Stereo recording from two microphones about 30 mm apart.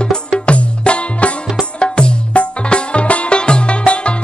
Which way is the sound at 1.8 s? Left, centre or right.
Left.